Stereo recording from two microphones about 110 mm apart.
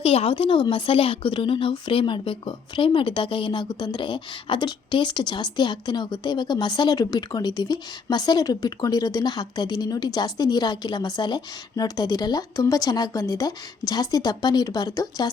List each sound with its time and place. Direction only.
0.0 s speech: 60° left (ahead or behind); by 15.3 s 35° left (ahead or behind)